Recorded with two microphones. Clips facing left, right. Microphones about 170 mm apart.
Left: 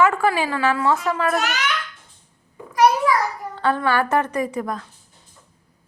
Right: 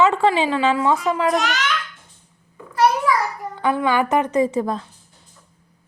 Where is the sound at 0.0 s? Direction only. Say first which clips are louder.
Right 2 dB; 20° right (ahead or behind).